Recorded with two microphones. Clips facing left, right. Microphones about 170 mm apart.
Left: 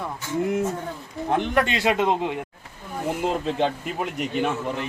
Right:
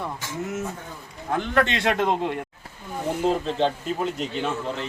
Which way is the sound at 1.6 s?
5° left (ahead or behind).